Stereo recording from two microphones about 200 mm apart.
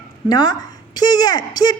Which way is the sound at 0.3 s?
20° left (ahead or behind).